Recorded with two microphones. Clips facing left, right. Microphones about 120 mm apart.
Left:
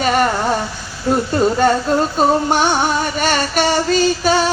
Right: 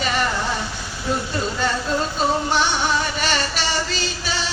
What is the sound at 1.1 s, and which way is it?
Music, 50° left (ahead or behind).